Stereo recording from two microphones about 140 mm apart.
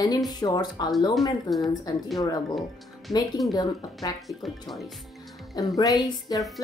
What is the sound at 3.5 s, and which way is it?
Speech, 25° left (ahead or behind).